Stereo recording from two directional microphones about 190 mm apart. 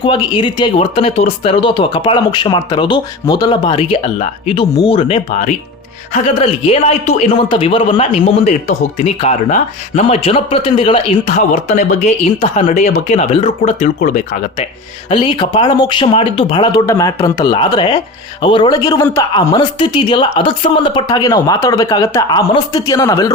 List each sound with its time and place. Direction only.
0.0 s speech: 25° left (ahead or behind); by 14.7 s 40° left (ahead or behind)
15.1 s a man's voice: 25° left (ahead or behind)